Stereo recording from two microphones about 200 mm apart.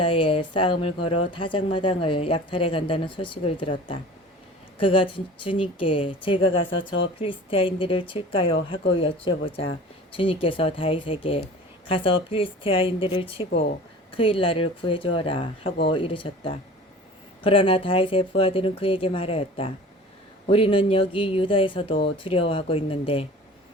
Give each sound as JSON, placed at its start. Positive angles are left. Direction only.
{"t": 0.0, "sound": "speech", "side_deg": 25}
{"t": 6.7, "sound": "speech", "side_deg": 70}
{"t": 7.2, "sound": "speech", "side_deg": 25}